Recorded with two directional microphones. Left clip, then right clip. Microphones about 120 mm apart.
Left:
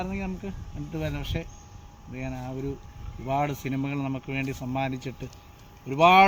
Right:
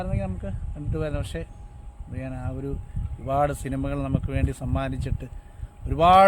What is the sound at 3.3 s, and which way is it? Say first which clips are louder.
Speech: right 3 dB; 30° right (ahead or behind).